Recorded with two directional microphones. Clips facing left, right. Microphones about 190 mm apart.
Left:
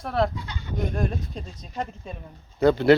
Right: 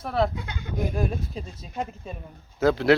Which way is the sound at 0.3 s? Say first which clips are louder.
Right 1 dB; 55° right (ahead or behind).